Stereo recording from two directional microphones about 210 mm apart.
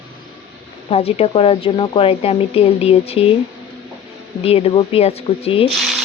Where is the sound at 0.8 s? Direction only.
30° left (ahead or behind).